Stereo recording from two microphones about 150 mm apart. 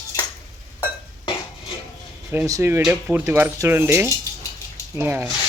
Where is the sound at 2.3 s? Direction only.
20° right (ahead or behind).